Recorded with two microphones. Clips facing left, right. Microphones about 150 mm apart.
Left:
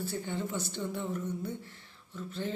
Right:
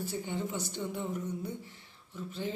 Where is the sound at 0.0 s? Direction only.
15° right (ahead or behind).